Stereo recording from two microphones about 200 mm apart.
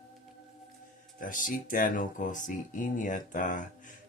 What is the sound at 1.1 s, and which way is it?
Speech, 40° left (ahead or behind).